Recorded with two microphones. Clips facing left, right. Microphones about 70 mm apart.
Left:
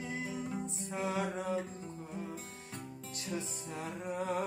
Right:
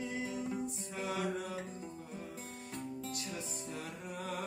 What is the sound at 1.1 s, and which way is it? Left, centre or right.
Mantra, left.